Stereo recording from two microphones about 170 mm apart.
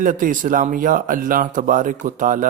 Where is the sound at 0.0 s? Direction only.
50° right (ahead or behind).